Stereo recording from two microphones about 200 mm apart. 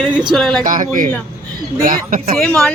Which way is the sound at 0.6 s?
45° right (ahead or behind).